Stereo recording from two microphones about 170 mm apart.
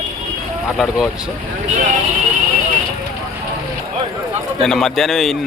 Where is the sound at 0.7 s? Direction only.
Centre (ahead or behind).